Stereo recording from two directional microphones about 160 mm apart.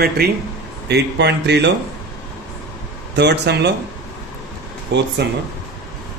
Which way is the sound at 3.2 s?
90° right.